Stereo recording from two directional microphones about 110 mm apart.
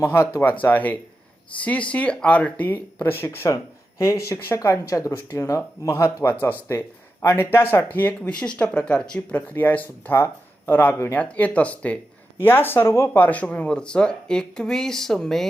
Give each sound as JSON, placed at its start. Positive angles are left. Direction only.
{"t": 0.0, "sound": "speech", "side_deg": 25}